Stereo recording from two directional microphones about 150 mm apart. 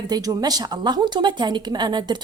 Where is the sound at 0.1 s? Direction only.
25° right (ahead or behind).